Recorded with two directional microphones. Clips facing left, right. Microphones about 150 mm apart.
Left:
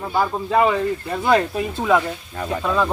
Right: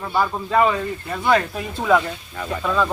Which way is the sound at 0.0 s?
20° left (ahead or behind).